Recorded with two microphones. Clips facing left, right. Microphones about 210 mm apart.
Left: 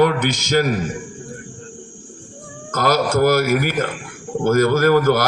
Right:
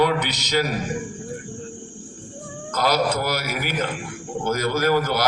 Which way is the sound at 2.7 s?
50° left (ahead or behind).